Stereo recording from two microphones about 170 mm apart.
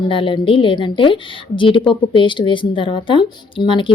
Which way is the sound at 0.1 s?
30° left (ahead or behind).